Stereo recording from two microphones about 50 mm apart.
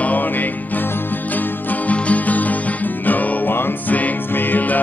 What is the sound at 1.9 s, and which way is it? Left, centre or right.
Music, left.